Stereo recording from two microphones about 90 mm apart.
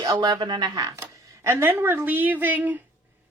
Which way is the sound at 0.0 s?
45° right (ahead or behind).